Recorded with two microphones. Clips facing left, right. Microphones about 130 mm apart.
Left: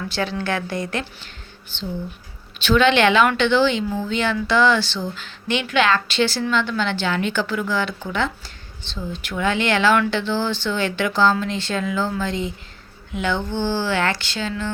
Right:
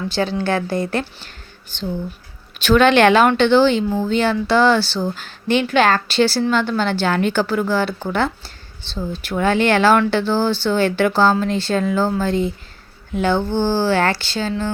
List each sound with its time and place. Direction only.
0.1 s speech: 30° right (ahead or behind)
2.6 s speech: 45° right (ahead or behind)